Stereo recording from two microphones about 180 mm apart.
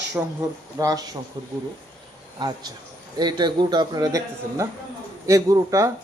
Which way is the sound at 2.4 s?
25° right (ahead or behind).